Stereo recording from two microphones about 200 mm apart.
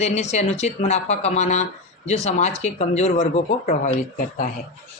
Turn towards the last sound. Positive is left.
turn(degrees=40)  # may be behind; listen again after turning